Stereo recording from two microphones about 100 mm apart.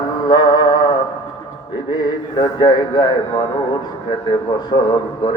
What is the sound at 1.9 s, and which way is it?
A man's voice, 45° left (ahead or behind).